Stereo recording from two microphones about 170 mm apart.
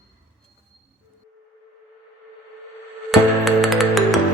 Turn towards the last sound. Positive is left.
turn(degrees=0)  # may be behind; listen again after turning